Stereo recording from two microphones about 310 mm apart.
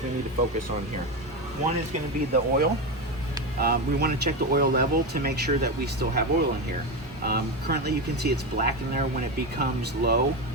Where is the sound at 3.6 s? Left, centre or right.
Right.